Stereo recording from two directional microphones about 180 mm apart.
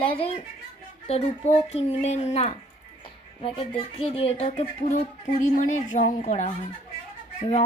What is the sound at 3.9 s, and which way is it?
Speech, 30° left (ahead or behind).